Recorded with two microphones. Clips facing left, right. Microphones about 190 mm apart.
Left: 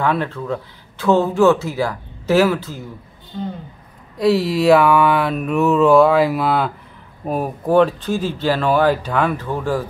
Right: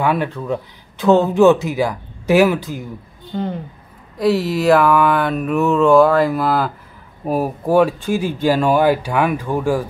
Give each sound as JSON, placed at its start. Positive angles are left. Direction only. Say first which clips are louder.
{"t": 0.0, "sound": "speech", "louder": "right 1 dB", "side_deg": -15}
{"t": 4.2, "sound": "mantra", "louder": "left 1 dB", "side_deg": 0}
{"t": 7.2, "sound": "speech", "louder": "right 2 dB", "side_deg": -5}